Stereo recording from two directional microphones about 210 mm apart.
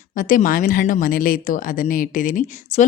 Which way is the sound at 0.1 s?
40° left (ahead or behind).